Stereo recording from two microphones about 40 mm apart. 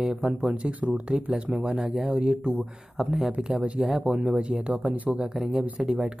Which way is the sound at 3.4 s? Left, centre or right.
Right.